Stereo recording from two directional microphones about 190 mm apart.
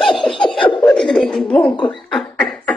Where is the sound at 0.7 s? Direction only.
25° left (ahead or behind).